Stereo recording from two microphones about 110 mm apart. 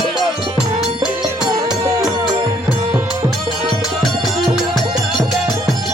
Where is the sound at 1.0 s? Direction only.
5° right (ahead or behind).